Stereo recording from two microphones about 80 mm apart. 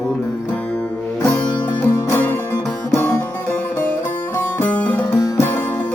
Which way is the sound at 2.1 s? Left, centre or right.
Left.